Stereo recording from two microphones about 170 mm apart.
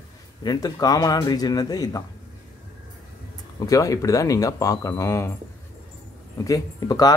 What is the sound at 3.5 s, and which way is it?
Speech, 20° left (ahead or behind).